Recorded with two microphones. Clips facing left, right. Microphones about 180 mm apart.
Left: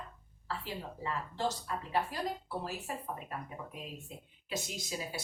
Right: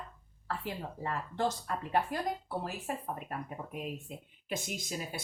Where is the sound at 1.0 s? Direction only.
50° right (ahead or behind).